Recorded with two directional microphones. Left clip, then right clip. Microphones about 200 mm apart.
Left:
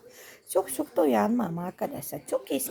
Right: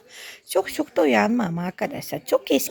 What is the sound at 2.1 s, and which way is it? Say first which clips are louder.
Speech: right 12 dB; 30° right (ahead or behind).